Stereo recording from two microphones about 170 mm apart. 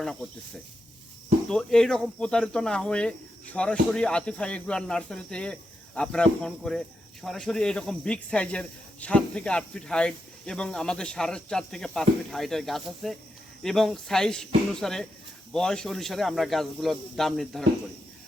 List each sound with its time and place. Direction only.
0.0 s speech: 5° left (ahead or behind)
1.5 s speech: 5° left (ahead or behind)